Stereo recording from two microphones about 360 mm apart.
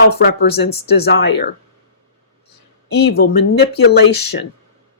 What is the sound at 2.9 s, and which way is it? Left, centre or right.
Speech, left.